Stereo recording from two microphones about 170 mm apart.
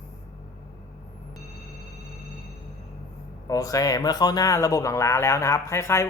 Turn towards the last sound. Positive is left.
turn(degrees=15)  # may be behind; listen again after turning